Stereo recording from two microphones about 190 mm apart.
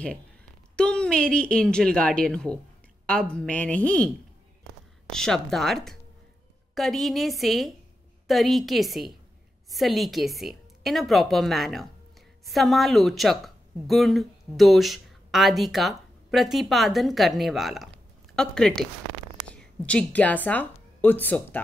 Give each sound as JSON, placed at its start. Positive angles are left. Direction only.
{"t": 0.7, "sound": "speech", "side_deg": 5}
{"t": 5.1, "sound": "a woman's voice", "side_deg": 0}